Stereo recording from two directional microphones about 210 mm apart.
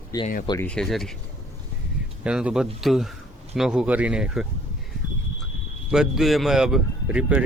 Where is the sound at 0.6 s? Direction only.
5° left (ahead or behind).